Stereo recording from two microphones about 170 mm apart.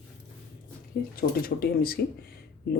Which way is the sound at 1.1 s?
60° left (ahead or behind).